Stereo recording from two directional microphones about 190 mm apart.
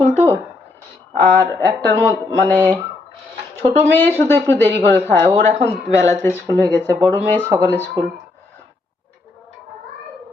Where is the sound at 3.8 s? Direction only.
10° left (ahead or behind).